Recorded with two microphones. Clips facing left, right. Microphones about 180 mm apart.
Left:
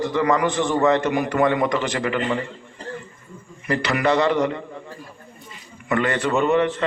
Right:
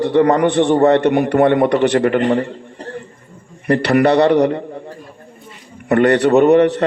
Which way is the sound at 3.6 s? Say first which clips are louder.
Right 8 dB; 60° right (ahead or behind).